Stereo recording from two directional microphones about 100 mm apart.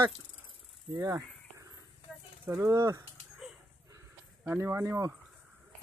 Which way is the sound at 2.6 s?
30° right (ahead or behind).